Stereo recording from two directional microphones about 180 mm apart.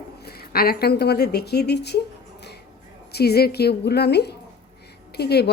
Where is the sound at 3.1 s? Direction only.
60° left (ahead or behind).